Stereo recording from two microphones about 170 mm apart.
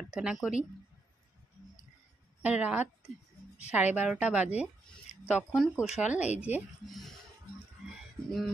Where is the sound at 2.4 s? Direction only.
10° right (ahead or behind).